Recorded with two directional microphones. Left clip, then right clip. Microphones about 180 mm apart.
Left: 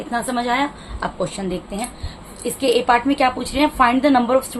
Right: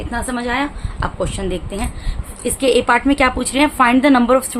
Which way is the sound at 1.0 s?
30° right (ahead or behind).